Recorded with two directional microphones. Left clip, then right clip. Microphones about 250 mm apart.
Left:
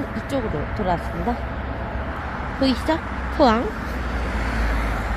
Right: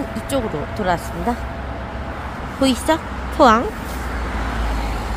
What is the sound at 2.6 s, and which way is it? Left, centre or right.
Speech, centre.